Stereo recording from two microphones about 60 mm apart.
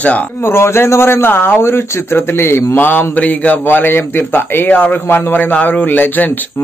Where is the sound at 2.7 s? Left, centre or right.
Left.